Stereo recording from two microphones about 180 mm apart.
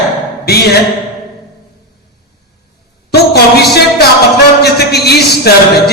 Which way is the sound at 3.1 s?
65° left (ahead or behind).